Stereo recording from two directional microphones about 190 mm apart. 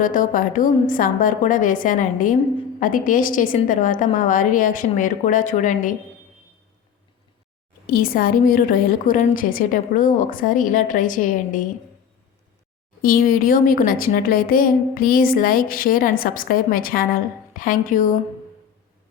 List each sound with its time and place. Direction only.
0.0 s speech: 45° left (ahead or behind)
7.9 s speech: 50° left (ahead or behind)
13.0 s speech: 50° left (ahead or behind)